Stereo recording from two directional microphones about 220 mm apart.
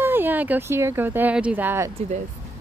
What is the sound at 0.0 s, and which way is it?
Speech, 10° right (ahead or behind).